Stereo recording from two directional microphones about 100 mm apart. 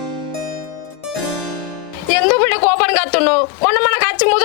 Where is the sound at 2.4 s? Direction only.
20° left (ahead or behind).